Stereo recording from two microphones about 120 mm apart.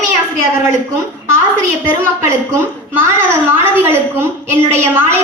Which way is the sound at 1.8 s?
20° right (ahead or behind).